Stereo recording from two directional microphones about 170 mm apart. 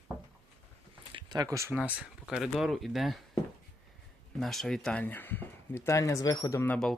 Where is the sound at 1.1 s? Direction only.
25° right (ahead or behind).